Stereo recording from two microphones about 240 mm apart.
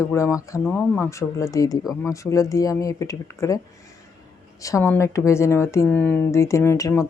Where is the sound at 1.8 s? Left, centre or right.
Centre.